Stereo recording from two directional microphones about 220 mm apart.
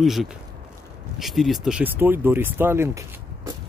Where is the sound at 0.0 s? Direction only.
Centre (ahead or behind).